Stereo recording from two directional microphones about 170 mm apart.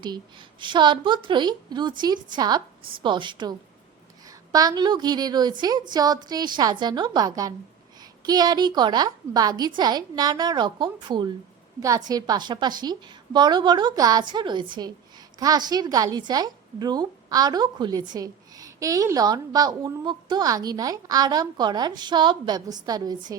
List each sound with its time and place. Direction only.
0.0 s a woman's voice: 25° right (ahead or behind)